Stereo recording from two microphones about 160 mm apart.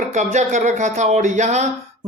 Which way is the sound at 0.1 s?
45° right (ahead or behind).